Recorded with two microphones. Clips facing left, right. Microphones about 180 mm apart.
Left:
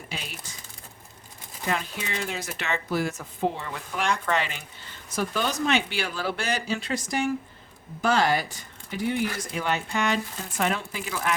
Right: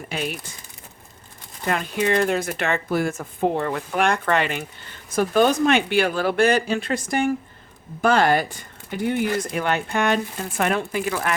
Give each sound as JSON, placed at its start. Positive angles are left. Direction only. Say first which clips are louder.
{"t": 0.1, "sound": "speech", "louder": "right 12 dB", "side_deg": -55}
{"t": 1.6, "sound": "speech", "louder": "right 8 dB", "side_deg": -55}